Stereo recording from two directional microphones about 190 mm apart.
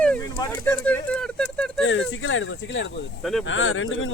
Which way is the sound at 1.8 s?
90° left.